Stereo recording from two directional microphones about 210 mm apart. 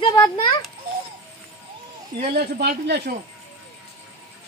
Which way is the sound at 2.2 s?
50° right (ahead or behind).